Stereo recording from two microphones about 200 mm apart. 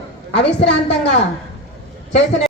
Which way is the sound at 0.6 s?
60° left (ahead or behind).